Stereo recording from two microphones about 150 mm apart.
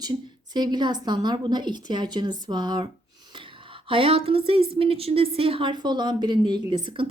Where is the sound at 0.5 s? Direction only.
30° right (ahead or behind).